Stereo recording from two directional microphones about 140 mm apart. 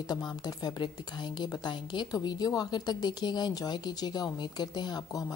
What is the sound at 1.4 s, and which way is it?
A woman's voice, 30° left (ahead or behind).